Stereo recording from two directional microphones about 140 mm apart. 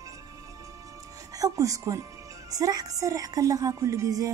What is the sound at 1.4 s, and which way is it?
Speech, 25° right (ahead or behind).